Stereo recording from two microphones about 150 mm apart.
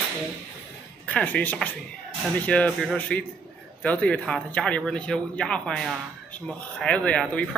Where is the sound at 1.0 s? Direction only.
10° left (ahead or behind).